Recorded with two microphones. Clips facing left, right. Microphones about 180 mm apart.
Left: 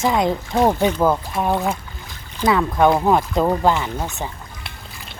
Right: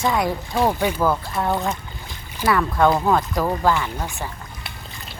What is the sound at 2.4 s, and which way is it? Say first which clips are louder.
Speech: left 2 dB; 15° left (ahead or behind).